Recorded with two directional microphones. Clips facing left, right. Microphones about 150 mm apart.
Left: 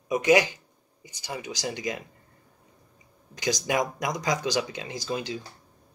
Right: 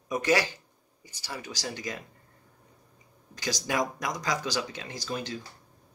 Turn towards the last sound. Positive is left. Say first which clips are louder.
# left 3 dB
turn(degrees=10)  # may be behind; listen again after turning